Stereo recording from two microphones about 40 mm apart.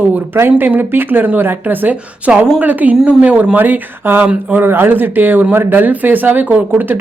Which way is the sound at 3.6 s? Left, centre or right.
Right.